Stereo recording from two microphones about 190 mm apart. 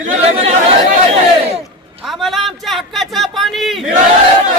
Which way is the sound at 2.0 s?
Centre (ahead or behind).